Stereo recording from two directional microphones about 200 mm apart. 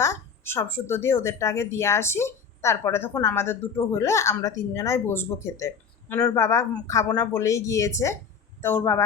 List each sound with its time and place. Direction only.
0.0 s speech: 15° left (ahead or behind)